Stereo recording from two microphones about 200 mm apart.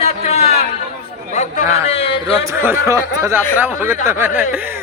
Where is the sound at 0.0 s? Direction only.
30° left (ahead or behind).